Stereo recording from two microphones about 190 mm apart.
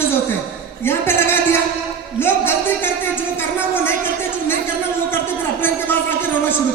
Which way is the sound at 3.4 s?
10° left (ahead or behind).